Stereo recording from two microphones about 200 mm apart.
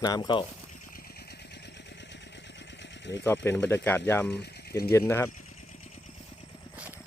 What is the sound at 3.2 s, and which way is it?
Speech, 10° left (ahead or behind).